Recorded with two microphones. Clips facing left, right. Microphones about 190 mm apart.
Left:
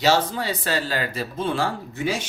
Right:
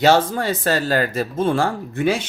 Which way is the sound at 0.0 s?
50° right (ahead or behind).